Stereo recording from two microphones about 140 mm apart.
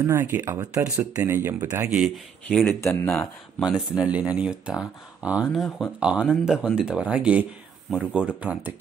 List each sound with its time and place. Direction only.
0.0 s speech: 15° right (ahead or behind)
2.6 s speech: 15° left (ahead or behind)
3.1 s speech: 5° left (ahead or behind)